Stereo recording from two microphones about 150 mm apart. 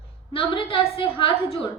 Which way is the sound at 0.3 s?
35° left (ahead or behind).